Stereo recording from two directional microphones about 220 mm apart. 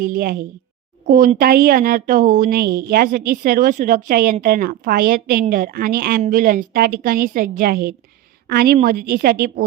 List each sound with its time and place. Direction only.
0.0 s a woman's voice: 40° right (ahead or behind)